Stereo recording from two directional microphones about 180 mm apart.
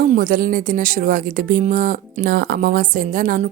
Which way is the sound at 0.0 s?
50° right (ahead or behind).